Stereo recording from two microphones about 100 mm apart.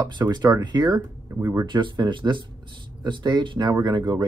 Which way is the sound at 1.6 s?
55° right (ahead or behind).